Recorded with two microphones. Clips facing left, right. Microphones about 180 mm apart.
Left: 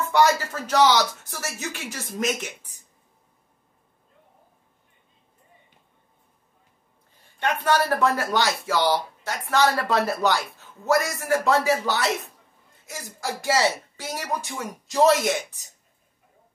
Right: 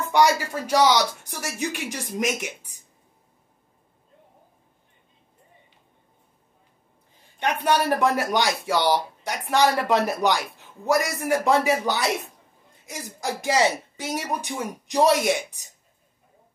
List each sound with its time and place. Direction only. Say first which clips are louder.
0.0 s speech: even; 15° right (ahead or behind)
7.3 s speech: even; 15° right (ahead or behind)